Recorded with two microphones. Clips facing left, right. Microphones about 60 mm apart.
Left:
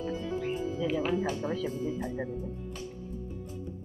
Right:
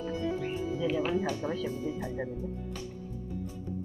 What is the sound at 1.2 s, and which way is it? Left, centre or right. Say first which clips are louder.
Music: left 1 dB; left.